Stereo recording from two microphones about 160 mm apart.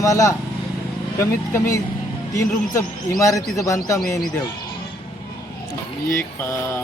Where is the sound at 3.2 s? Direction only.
20° left (ahead or behind).